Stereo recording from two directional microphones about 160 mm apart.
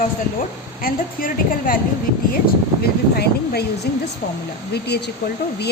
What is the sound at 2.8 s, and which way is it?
Speech, 80° left.